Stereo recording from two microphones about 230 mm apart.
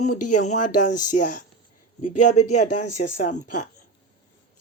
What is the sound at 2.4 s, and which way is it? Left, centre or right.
Speech, left.